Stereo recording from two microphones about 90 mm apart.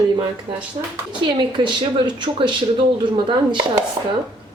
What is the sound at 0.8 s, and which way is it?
Speech, 90° right.